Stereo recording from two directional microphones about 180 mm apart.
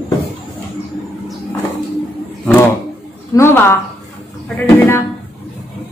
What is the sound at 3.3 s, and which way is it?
A woman's voice, 15° left (ahead or behind).